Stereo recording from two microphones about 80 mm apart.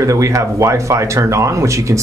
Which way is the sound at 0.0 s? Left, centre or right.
Right.